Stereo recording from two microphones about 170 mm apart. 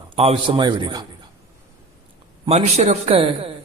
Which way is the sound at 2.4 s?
40° right (ahead or behind).